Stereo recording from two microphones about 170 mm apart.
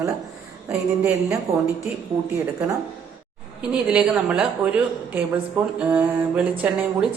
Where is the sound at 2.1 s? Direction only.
30° right (ahead or behind).